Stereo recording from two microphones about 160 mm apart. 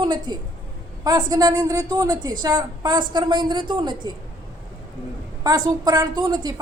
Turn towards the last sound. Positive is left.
turn(degrees=-25)  # may be behind; listen again after turning